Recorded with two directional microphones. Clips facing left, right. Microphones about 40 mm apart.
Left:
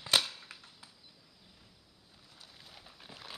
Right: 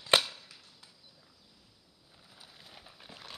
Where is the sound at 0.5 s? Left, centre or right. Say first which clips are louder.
Left 4 dB; left.